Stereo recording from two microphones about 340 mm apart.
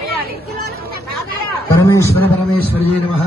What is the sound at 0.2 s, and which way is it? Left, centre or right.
Chatter, right.